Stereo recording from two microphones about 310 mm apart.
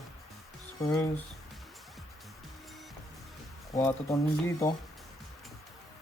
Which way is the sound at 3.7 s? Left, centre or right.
Centre.